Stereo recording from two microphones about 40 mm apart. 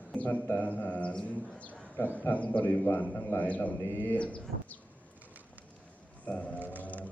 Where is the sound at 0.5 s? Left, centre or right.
Left.